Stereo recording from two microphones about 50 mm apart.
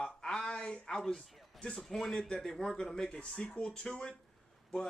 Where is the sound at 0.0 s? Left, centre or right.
Centre.